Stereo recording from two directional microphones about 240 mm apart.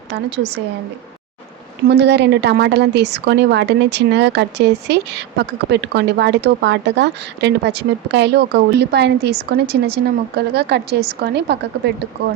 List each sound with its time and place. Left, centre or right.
0.1 s a woman's voice: right
1.9 s a woman's voice: right